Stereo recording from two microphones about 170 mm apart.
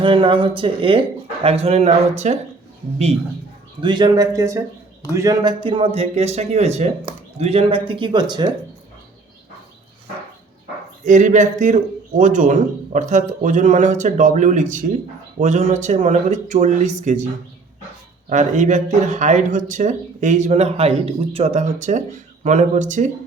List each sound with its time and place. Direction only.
0.0 s speech: 30° right (ahead or behind)
3.8 s speech: 25° right (ahead or behind)
11.0 s speech: 45° right (ahead or behind)
18.3 s speech: 45° right (ahead or behind)